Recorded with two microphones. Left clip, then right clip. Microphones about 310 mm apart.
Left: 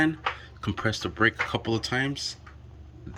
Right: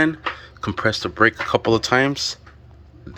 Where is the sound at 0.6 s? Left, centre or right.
Centre.